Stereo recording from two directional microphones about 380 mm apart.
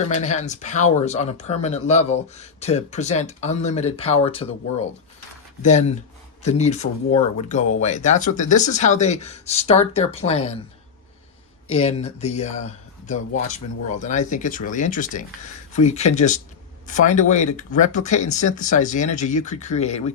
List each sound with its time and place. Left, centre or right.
0.1 s speech: centre
11.7 s speech: centre